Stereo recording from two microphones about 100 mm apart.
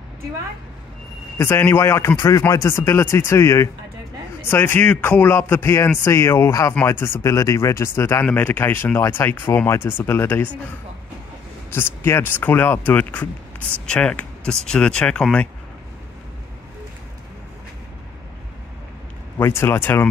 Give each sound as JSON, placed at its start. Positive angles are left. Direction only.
{"t": 1.4, "sound": "speech", "side_deg": 25}
{"t": 11.7, "sound": "speech", "side_deg": 25}
{"t": 19.3, "sound": "speech", "side_deg": 25}